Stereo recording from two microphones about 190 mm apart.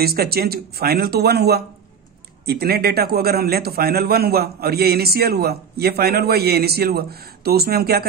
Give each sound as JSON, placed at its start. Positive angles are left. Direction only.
{"t": 0.0, "sound": "a man's voice", "side_deg": -55}